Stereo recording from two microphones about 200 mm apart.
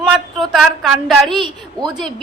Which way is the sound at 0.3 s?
Centre (ahead or behind).